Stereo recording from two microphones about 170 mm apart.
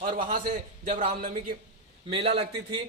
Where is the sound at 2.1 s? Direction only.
35° right (ahead or behind).